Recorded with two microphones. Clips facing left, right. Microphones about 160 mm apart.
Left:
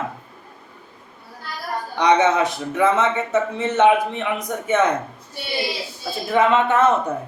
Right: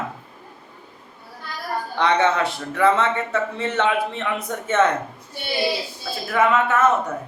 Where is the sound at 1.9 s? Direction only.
15° left (ahead or behind).